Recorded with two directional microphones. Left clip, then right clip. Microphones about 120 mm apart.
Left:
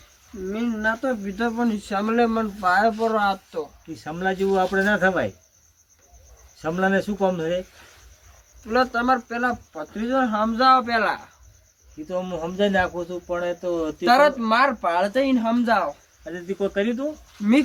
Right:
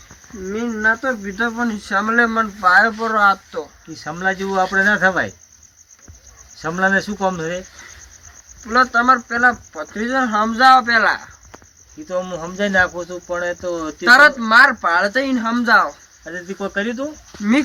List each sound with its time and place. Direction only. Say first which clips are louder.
0.6 s speech: right 7 dB; 40° left (ahead or behind)
4.0 s speech: right 3 dB; 5° left (ahead or behind)
6.6 s speech: right 5 dB; 5° left (ahead or behind)
8.6 s speech: right 7 dB; 30° left (ahead or behind)
12.0 s speech: right 4 dB; 5° right (ahead or behind)
14.0 s speech: right 7 dB; 35° left (ahead or behind)
16.6 s speech: right 1 dB; 20° right (ahead or behind)